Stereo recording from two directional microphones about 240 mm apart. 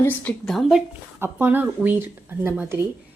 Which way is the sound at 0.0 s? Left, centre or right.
Centre.